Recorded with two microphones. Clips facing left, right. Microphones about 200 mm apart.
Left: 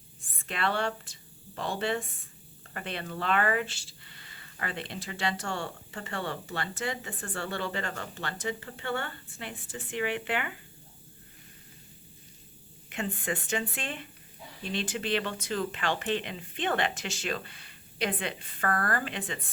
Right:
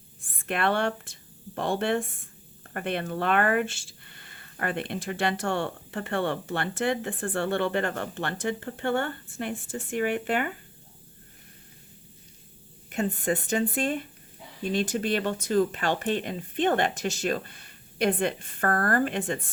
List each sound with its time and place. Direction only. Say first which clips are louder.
0.4 s speech: right 5 dB; 55° right (ahead or behind)
12.9 s speech: right 6 dB; 40° right (ahead or behind)